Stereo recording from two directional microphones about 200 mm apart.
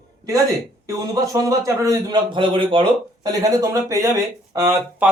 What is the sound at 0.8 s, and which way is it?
A man's voice, 15° right (ahead or behind).